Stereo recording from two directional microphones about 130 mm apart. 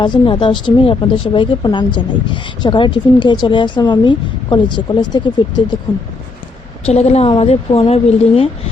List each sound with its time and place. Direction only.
0.0 s speech: 35° left (ahead or behind)
6.8 s speech: 55° left (ahead or behind)